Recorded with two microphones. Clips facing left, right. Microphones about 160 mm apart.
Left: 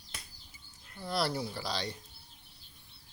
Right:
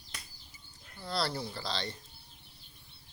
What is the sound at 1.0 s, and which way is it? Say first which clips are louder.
Speech: left 2 dB; 15° left (ahead or behind).